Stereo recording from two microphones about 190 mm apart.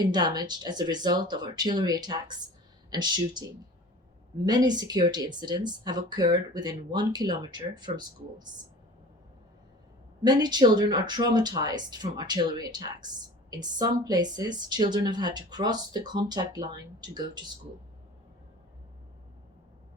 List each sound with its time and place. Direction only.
0.0 s speech: 20° right (ahead or behind)
4.4 s speech: 20° right (ahead or behind)
10.2 s speech: 20° right (ahead or behind)